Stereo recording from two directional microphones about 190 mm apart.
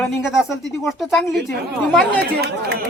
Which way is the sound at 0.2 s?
5° right (ahead or behind).